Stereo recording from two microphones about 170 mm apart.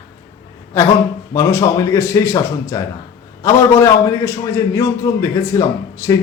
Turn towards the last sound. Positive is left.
turn(degrees=15)  # may be behind; listen again after turning